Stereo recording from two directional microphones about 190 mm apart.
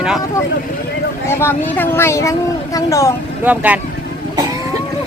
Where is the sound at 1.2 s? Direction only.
10° left (ahead or behind).